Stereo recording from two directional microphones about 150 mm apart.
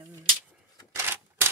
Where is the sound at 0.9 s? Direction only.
15° right (ahead or behind).